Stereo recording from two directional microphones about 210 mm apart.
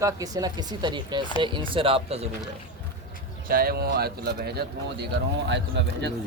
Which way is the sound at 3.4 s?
45° right (ahead or behind).